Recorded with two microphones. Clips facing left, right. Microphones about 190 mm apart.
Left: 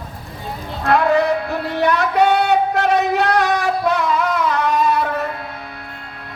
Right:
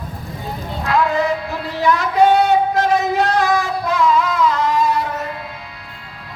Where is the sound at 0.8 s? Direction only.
60° left (ahead or behind).